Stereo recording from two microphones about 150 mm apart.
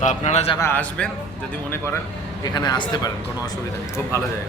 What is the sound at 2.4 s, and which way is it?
Speech, 25° left (ahead or behind).